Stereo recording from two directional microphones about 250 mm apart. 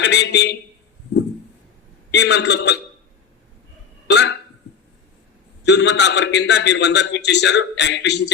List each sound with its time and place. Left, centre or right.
0.0 s a man's voice: left
2.1 s a man's voice: left
4.1 s a man's voice: left
5.6 s a man's voice: left